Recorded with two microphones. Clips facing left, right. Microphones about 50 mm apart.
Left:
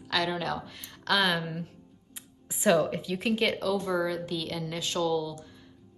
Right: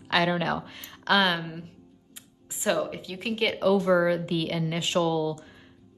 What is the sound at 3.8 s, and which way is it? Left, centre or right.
A woman's voice, right.